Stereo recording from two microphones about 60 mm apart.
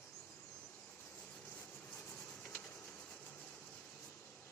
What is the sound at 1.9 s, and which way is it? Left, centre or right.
Rub, centre.